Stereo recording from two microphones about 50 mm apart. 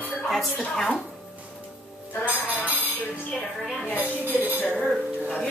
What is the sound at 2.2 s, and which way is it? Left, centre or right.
Music, right.